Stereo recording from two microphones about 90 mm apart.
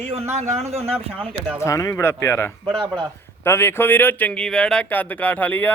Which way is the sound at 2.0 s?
25° left (ahead or behind).